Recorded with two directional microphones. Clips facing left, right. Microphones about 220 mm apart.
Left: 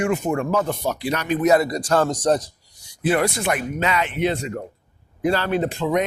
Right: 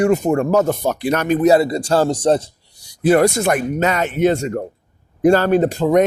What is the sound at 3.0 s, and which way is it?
Speech, 40° right (ahead or behind).